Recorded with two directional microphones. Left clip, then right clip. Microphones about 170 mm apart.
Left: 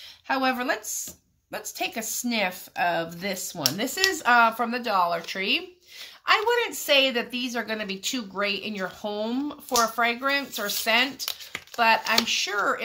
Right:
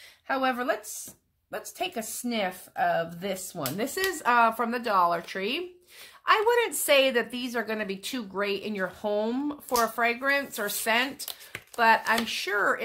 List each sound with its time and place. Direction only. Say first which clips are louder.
0.3 s a woman's voice: left 2 dB; 35° right (ahead or behind)
1.8 s a woman's voice: left 3 dB; 35° right (ahead or behind)